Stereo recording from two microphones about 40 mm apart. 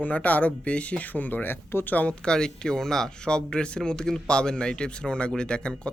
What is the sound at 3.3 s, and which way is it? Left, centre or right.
Speech, left.